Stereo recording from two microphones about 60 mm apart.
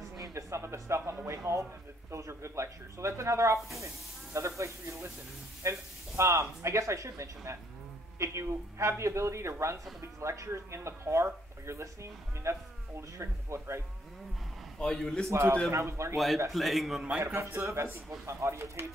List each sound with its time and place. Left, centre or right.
0.3 s speech: right
14.8 s a man's voice: centre
15.2 s speech: right
16.5 s a man's voice: centre
17.2 s speech: right